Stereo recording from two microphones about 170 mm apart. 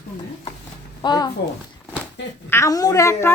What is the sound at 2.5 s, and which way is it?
Speech, 20° left (ahead or behind).